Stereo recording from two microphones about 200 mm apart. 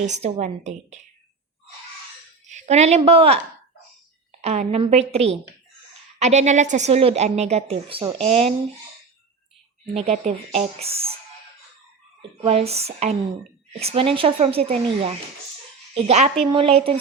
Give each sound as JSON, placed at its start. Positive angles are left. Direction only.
{"t": 0.0, "sound": "a woman's voice", "side_deg": -35}
{"t": 2.5, "sound": "a woman's voice", "side_deg": -35}
{"t": 9.8, "sound": "a woman's voice", "side_deg": -30}
{"t": 12.4, "sound": "a woman's voice", "side_deg": -30}